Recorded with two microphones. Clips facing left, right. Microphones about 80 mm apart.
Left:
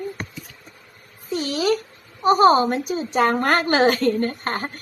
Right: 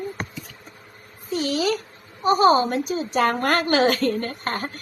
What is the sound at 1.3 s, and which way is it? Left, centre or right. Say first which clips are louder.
A woman's voice: left 1 dB; left.